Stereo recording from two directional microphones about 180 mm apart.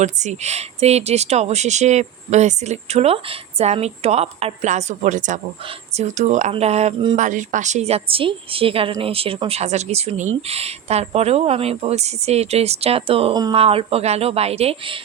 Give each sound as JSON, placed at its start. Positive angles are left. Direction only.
{"t": 0.0, "sound": "a woman's voice", "side_deg": -40}
{"t": 7.2, "sound": "a woman's voice", "side_deg": -45}